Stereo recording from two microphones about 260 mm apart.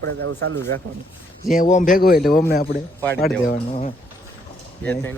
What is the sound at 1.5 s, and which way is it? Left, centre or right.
Speech, left.